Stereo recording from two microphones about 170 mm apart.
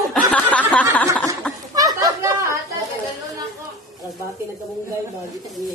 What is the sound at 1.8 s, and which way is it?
Chatter, 20° right (ahead or behind).